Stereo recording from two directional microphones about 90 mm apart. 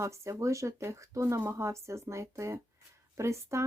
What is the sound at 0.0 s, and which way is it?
Speech, 35° right (ahead or behind).